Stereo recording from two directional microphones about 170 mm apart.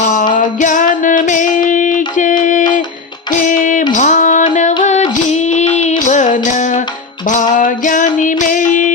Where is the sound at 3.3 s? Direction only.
50° left (ahead or behind).